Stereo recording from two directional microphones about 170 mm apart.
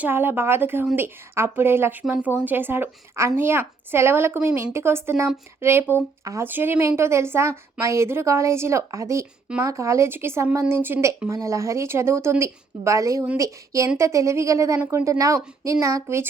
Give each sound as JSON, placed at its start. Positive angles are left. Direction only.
{"t": 0.0, "sound": "speech", "side_deg": -10}